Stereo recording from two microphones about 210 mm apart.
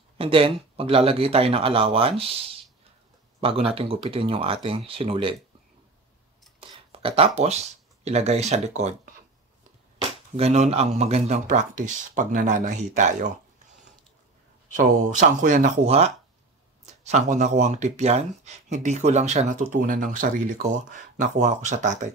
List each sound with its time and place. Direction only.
0.2 s speech: 25° right (ahead or behind)
6.6 s speech: 25° right (ahead or behind)
14.7 s speech: 40° right (ahead or behind)